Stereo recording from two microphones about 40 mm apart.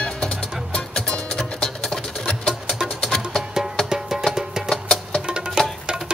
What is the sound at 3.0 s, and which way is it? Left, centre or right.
Music, centre.